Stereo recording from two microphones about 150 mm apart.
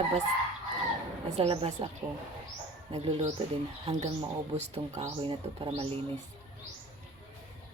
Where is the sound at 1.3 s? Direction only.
40° right (ahead or behind).